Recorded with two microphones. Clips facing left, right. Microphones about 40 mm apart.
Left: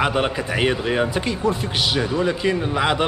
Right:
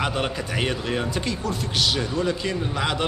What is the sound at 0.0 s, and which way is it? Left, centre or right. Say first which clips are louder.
A man's voice: left 5 dB; centre.